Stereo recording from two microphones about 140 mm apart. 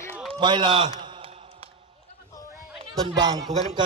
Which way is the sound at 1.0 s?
35° right (ahead or behind).